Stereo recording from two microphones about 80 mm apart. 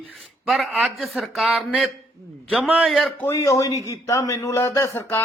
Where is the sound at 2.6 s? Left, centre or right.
Centre.